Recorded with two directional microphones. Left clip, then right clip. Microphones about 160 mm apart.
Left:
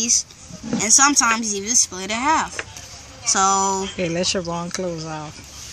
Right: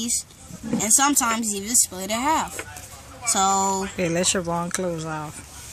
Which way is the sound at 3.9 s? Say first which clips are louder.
Left 1 dB; 5° right (ahead or behind).